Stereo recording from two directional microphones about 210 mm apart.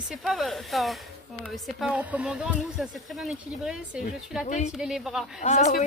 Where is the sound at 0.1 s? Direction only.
Centre (ahead or behind).